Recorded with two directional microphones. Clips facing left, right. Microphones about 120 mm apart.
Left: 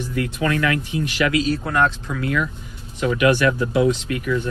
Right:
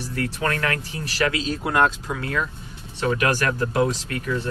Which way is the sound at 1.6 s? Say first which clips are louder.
Even; 10° right (ahead or behind).